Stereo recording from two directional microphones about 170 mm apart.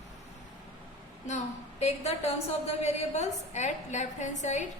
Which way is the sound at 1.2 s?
40° left (ahead or behind).